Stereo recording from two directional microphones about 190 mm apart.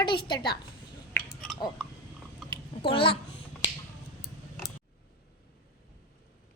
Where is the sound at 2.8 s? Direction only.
30° left (ahead or behind).